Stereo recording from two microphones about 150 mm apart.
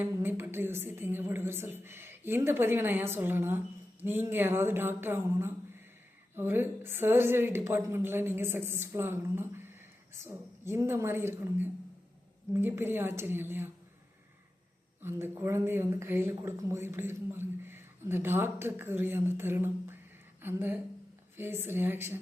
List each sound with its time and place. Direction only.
0.0 s a woman's voice: 15° right (ahead or behind)
15.0 s a woman's voice: 15° right (ahead or behind)